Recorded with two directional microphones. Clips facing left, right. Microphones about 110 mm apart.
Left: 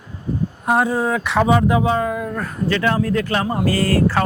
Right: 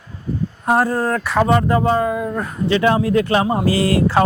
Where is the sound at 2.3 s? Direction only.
15° right (ahead or behind).